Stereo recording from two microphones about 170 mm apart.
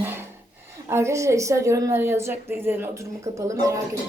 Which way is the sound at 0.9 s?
15° right (ahead or behind).